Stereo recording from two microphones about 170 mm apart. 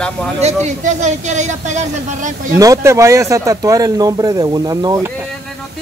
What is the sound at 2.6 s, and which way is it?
Speech, 20° right (ahead or behind).